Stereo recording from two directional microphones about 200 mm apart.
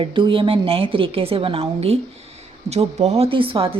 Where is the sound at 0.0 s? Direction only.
25° right (ahead or behind).